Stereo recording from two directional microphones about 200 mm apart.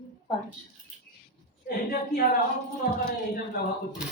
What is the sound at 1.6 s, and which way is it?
Speech, 45° left (ahead or behind).